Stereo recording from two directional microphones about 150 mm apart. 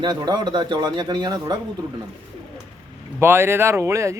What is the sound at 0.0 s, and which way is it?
Speech, 30° right (ahead or behind).